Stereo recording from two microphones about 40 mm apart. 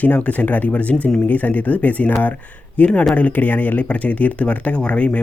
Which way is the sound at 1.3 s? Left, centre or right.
Left.